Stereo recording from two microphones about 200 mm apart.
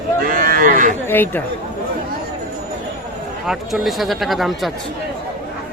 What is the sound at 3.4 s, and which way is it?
Speech, centre (ahead or behind).